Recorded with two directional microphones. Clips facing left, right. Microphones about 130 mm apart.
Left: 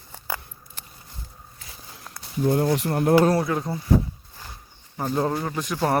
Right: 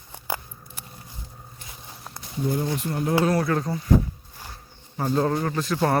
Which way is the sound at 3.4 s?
15° left (ahead or behind).